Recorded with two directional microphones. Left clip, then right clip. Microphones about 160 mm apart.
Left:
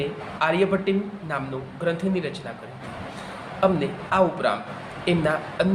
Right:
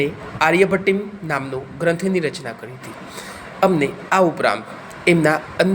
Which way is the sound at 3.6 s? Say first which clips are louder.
Right 5 dB; 45° right (ahead or behind).